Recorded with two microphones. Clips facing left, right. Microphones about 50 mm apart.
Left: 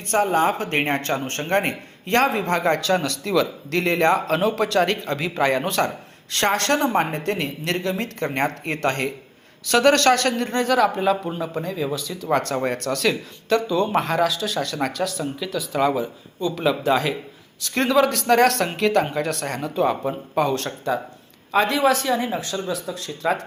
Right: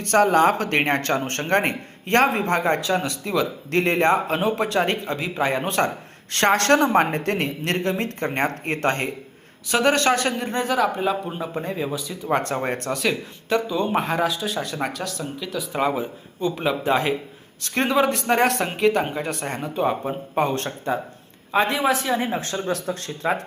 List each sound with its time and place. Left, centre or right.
0.0 s speech: right
2.6 s a man's voice: centre
3.7 s speech: right
5.0 s a man's voice: centre; by 5.9 s right
6.3 s speech: right
9.6 s a man's voice: centre
11.6 s speech: right
11.9 s speech: centre
12.9 s a man's voice: centre
14.9 s speech: centre
15.7 s a man's voice: centre
22.6 s speech: right